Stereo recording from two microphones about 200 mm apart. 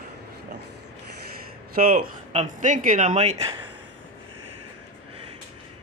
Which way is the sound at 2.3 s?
35° right (ahead or behind).